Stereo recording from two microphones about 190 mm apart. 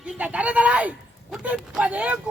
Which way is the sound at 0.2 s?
5° right (ahead or behind).